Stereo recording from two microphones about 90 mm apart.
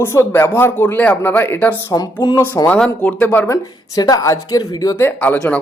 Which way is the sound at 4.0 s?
40° left (ahead or behind).